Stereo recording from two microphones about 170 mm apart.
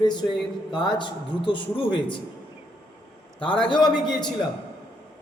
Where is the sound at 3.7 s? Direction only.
25° left (ahead or behind).